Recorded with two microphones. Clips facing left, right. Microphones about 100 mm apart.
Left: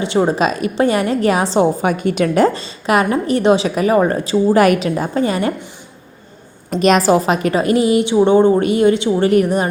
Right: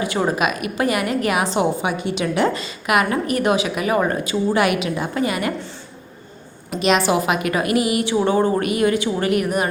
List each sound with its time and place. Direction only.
0.0 s a woman's voice: 25° left (ahead or behind)
1.8 s a woman's voice: 50° left (ahead or behind); by 5.5 s 30° left (ahead or behind)
6.7 s a woman's voice: 40° left (ahead or behind)